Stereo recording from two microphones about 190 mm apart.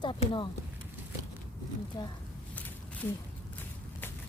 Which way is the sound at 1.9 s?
20° left (ahead or behind).